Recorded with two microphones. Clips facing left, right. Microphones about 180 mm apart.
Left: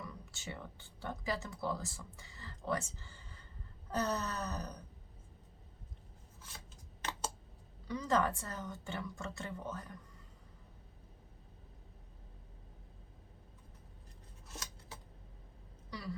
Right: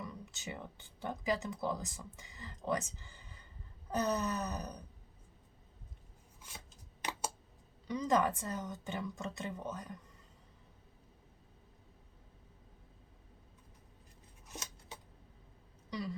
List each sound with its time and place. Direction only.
0.0 s a woman's voice: 20° right (ahead or behind)
7.9 s a woman's voice: 15° right (ahead or behind)
14.4 s a sound: 15° right (ahead or behind)
15.9 s speech: 20° right (ahead or behind)